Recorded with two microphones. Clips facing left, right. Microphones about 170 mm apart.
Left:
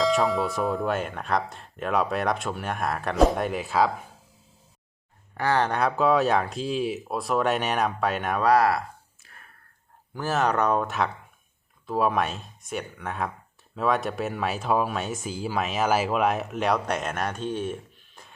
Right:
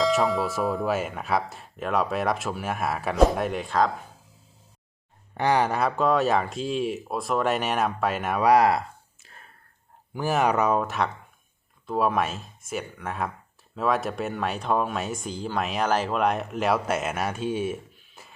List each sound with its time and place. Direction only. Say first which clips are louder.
0.0 s speech: even; centre (ahead or behind)
5.4 s speech: right 1 dB; 15° right (ahead or behind)
8.4 s speech: right 2 dB; 15° right (ahead or behind)
9.2 s whispering: right 3 dB; 25° right (ahead or behind)
10.2 s speech: right 1 dB; 15° right (ahead or behind)